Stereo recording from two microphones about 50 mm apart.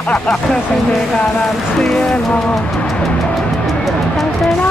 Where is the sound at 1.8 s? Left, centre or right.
Centre.